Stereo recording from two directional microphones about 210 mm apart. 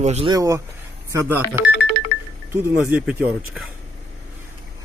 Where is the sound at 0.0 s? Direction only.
30° right (ahead or behind).